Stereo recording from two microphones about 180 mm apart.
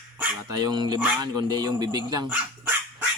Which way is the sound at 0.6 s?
25° right (ahead or behind).